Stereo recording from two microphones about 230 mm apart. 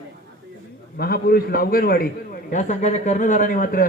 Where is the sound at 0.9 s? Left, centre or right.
Left.